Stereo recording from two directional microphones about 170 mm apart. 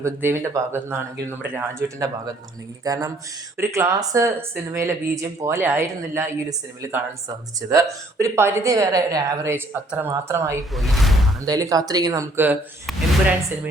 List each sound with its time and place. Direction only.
0.0 s speech: 15° right (ahead or behind)
10.8 s speech: centre (ahead or behind)
11.4 s speech: 20° right (ahead or behind)